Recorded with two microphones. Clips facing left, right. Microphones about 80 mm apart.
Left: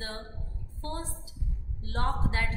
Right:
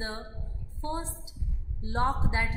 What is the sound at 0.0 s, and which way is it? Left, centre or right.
A woman's voice, right.